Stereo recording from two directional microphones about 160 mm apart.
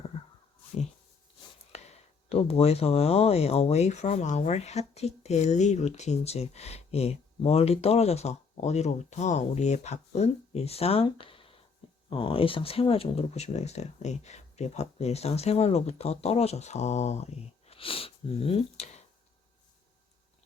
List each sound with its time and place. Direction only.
1.7 s speech: 40° left (ahead or behind)